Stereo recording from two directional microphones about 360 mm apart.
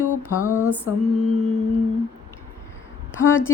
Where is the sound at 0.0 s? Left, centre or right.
Left.